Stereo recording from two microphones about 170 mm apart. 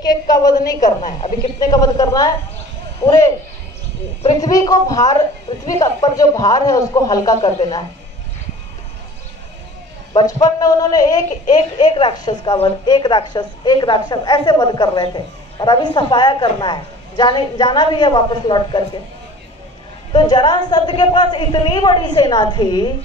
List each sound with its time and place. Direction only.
0.0 s a woman's voice: 20° left (ahead or behind)
4.4 s a woman's voice: 20° left (ahead or behind)
10.1 s a woman's voice: 20° left (ahead or behind)
20.1 s a woman's voice: 25° left (ahead or behind)